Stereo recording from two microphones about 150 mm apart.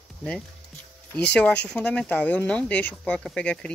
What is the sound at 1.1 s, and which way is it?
Speech, 5° left (ahead or behind).